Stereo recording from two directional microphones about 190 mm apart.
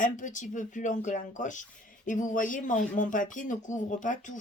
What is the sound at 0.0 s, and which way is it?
Speech, 40° left (ahead or behind).